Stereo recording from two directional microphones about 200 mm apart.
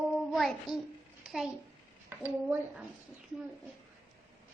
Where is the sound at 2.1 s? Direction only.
10° right (ahead or behind).